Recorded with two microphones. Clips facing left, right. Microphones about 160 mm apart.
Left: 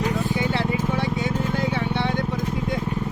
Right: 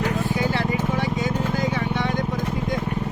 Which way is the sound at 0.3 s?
30° left (ahead or behind).